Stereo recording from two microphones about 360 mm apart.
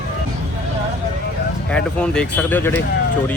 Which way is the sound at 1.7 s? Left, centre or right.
Centre.